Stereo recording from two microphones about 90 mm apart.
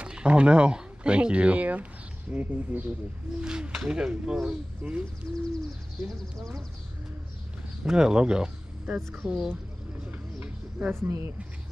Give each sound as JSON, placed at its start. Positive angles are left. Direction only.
{"t": 0.0, "sound": "speech", "side_deg": -10}
{"t": 6.0, "sound": "speech", "side_deg": 0}
{"t": 7.8, "sound": "speech", "side_deg": -10}
{"t": 10.4, "sound": "a sound", "side_deg": -25}